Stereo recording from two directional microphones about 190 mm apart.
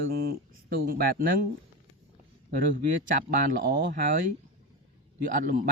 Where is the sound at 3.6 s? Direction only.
65° right (ahead or behind).